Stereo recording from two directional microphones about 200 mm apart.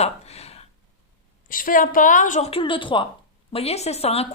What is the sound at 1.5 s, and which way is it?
A woman's voice, 45° left (ahead or behind).